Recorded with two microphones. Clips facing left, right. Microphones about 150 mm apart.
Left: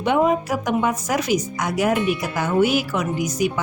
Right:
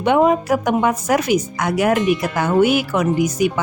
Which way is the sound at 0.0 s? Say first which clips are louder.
Right 4 dB; 70° right (ahead or behind).